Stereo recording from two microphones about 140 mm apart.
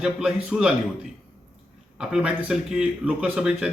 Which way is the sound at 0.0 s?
5° right (ahead or behind).